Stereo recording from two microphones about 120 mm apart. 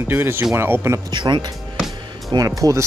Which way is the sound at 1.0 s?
40° right (ahead or behind).